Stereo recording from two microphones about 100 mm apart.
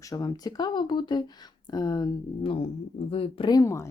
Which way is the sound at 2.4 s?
65° left (ahead or behind).